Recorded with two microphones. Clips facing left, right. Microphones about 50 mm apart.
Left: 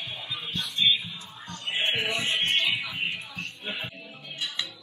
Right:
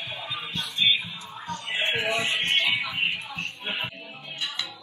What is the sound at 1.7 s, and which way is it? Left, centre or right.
Music, right.